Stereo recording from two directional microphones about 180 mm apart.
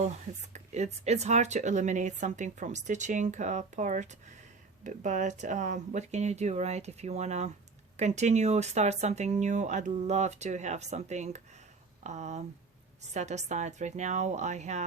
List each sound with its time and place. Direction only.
0.5 s speech: 40° right (ahead or behind)